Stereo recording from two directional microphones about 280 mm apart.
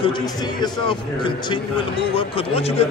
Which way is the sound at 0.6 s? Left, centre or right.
Centre.